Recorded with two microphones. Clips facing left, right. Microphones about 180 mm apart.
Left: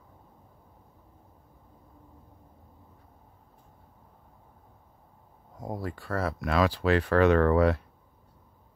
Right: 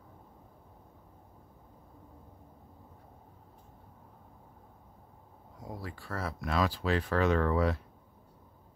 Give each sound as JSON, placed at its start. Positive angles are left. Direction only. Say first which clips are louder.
{"t": 5.6, "sound": "speech", "louder": "left 7 dB", "side_deg": 50}